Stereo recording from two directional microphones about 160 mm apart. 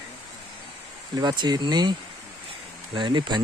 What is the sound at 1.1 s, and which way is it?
Speech, 25° right (ahead or behind).